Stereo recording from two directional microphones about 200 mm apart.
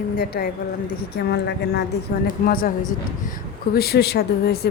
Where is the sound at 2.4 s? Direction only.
45° left (ahead or behind).